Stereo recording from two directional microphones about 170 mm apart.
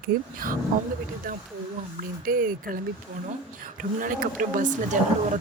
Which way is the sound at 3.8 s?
50° right (ahead or behind).